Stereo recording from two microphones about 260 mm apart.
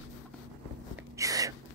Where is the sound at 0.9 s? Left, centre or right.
Centre.